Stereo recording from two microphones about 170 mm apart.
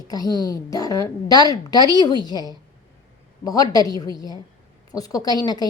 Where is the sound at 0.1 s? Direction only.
20° left (ahead or behind).